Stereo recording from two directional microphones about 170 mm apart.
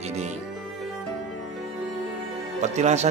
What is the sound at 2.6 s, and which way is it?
Speech, 40° right (ahead or behind).